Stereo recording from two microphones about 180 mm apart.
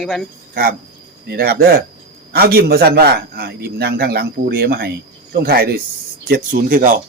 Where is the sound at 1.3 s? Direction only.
60° right (ahead or behind).